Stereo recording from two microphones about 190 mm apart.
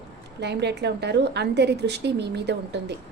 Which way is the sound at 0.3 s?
60° right (ahead or behind).